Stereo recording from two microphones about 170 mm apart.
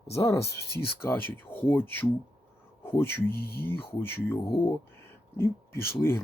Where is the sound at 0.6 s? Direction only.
70° left (ahead or behind).